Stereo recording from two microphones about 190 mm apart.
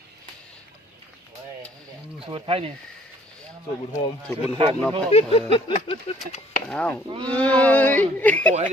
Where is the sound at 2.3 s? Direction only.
30° right (ahead or behind).